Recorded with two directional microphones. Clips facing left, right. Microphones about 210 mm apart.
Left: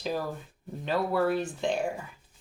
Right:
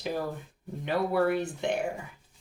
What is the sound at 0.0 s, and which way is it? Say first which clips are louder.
Speech: even; 20° right (ahead or behind).